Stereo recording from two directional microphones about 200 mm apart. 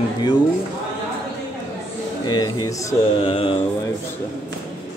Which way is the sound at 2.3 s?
20° left (ahead or behind).